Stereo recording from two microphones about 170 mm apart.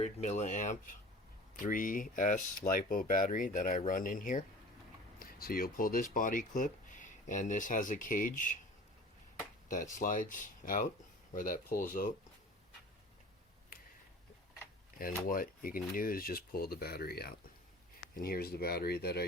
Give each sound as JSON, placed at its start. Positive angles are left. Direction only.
{"t": 0.0, "sound": "speech", "side_deg": 40}
{"t": 9.9, "sound": "speech", "side_deg": 55}
{"t": 15.3, "sound": "speech", "side_deg": 55}